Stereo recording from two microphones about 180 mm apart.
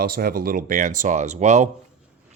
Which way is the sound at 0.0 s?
55° right (ahead or behind).